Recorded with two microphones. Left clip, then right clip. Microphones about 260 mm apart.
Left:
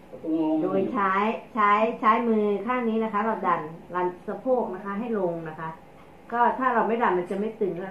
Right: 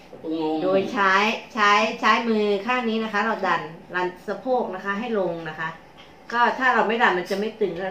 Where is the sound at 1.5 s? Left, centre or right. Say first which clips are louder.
Right 2 dB; centre.